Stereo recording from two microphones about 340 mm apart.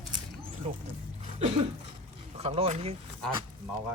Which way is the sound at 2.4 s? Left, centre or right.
Centre.